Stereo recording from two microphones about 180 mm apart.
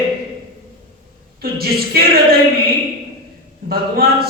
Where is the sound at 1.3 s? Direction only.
60° right (ahead or behind).